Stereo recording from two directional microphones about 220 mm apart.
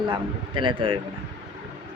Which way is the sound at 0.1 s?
20° right (ahead or behind).